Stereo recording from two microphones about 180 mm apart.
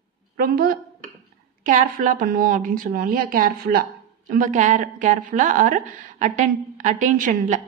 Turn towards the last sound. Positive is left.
turn(degrees=-45)  # may be behind; listen again after turning